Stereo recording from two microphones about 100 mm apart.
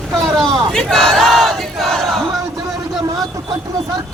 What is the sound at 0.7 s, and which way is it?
Battle cry, 5° left (ahead or behind).